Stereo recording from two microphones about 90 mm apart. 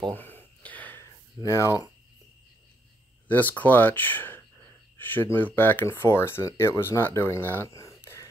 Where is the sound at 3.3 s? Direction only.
20° left (ahead or behind).